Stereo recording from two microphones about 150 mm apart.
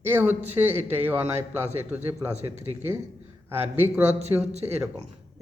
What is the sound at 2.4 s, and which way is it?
Speech, 45° right (ahead or behind).